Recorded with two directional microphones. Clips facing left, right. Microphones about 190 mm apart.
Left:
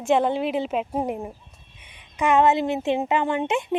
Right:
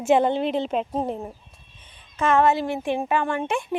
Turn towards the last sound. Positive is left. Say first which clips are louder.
# left 2 dB
turn(degrees=20)  # may be behind; listen again after turning